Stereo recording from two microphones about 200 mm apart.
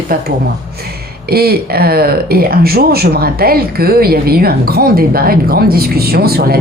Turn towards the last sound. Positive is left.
turn(degrees=-50)  # may be behind; listen again after turning